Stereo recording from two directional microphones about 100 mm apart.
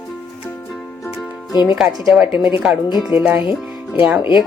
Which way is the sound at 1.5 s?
45° left (ahead or behind).